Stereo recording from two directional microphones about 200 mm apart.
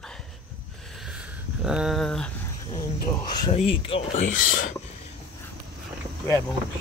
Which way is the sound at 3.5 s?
30° left (ahead or behind).